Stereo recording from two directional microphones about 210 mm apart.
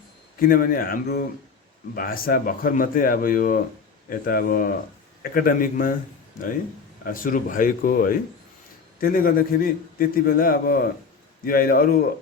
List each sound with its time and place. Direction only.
0.3 s a man's voice: 45° left (ahead or behind)
7.0 s a man's voice: 40° left (ahead or behind)